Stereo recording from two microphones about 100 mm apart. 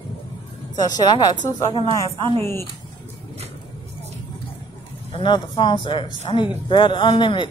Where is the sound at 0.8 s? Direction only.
45° left (ahead or behind).